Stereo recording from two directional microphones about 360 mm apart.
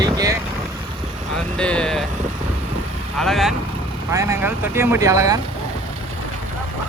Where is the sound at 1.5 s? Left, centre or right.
Centre.